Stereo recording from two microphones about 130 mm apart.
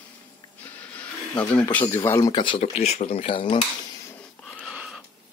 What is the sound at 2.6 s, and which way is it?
Speech, 55° left (ahead or behind).